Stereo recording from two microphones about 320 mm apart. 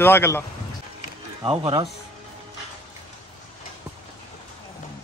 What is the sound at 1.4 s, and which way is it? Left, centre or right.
Speech, centre.